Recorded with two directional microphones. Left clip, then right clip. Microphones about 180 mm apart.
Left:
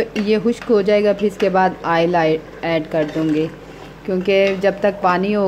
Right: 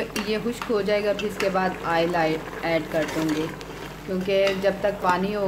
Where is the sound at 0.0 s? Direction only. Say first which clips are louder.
Left 9 dB; 30° left (ahead or behind).